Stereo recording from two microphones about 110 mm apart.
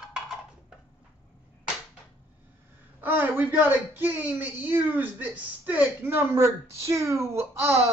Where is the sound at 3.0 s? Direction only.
20° right (ahead or behind).